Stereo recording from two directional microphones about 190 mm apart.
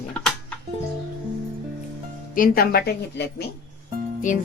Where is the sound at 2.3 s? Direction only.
45° left (ahead or behind).